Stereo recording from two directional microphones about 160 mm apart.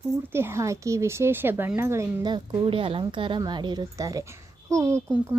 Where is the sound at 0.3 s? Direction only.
15° right (ahead or behind).